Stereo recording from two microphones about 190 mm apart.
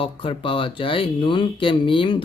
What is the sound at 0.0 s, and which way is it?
Speech, 30° left (ahead or behind).